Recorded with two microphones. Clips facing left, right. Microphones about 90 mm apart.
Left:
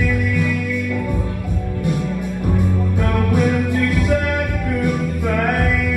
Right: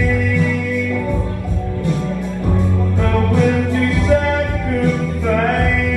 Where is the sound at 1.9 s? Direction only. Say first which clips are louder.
Even; 15° left (ahead or behind).